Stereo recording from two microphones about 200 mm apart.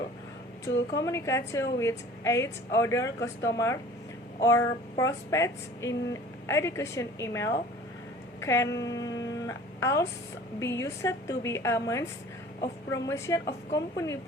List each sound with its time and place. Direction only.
0.6 s a woman's voice: 15° left (ahead or behind)